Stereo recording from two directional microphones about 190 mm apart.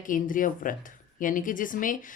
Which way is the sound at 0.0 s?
45° left (ahead or behind).